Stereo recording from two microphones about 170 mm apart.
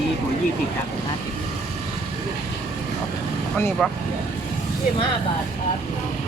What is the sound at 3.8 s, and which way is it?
Speech, 5° left (ahead or behind).